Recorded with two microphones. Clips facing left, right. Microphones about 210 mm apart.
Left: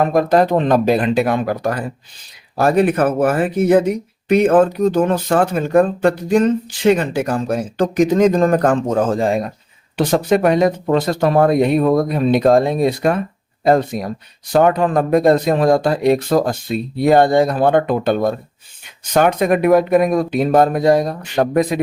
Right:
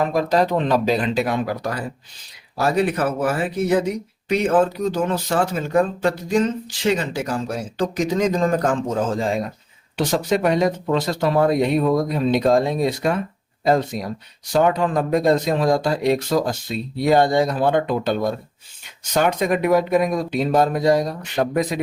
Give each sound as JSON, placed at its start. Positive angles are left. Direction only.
{"t": 0.0, "sound": "speech", "side_deg": 55}